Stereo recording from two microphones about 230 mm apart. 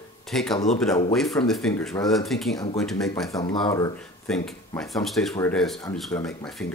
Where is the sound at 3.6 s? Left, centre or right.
Centre.